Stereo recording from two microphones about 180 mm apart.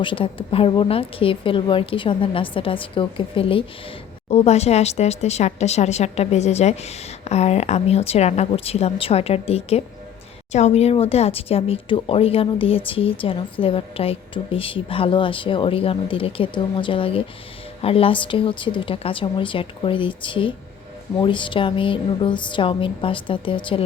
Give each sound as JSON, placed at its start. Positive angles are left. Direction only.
{"t": 0.0, "sound": "speech", "side_deg": 30}